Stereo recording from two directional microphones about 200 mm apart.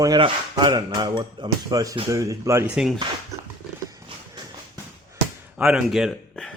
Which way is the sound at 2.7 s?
Centre (ahead or behind).